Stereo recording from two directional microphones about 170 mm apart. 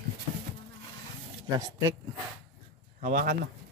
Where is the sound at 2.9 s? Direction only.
55° right (ahead or behind).